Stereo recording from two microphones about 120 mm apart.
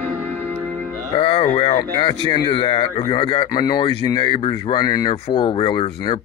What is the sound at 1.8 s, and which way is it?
Speech, 40° left (ahead or behind).